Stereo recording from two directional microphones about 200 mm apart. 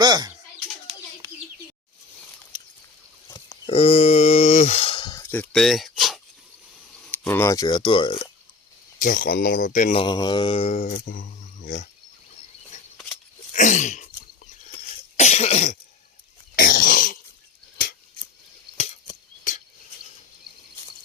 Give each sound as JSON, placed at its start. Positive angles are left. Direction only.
{"t": 0.0, "sound": "bird", "side_deg": -20}
{"t": 3.2, "sound": "a sound", "side_deg": 15}
{"t": 3.7, "sound": "speech", "side_deg": 30}
{"t": 9.0, "sound": "speech", "side_deg": 40}
{"t": 10.0, "sound": "mantra", "side_deg": 20}
{"t": 11.6, "sound": "wild animals", "side_deg": 40}
{"t": 13.5, "sound": "sneeze", "side_deg": 40}
{"t": 15.1, "sound": "cough", "side_deg": 35}
{"t": 19.5, "sound": "insect", "side_deg": 40}